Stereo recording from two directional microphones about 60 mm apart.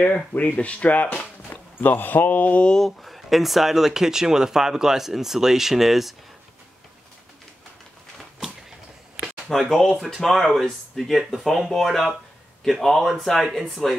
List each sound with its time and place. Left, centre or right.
0.0 s speech: left
2.7 s speech: centre
9.5 s speech: centre